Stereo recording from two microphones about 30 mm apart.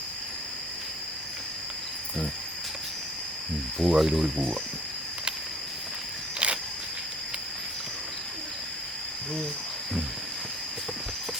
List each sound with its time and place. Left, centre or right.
3.8 s speech: centre
4.0 s speech: centre
6.4 s cricket: right